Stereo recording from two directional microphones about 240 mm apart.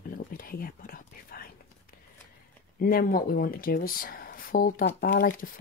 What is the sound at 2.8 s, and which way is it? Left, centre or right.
Speech, left.